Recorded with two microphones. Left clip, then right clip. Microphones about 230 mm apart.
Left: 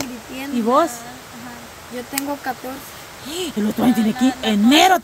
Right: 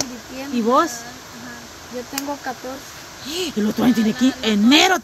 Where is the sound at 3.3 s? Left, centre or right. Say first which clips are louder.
Right 1 dB; centre.